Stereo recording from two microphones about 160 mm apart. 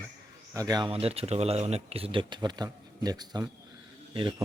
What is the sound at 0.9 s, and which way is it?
Speech, 40° right (ahead or behind).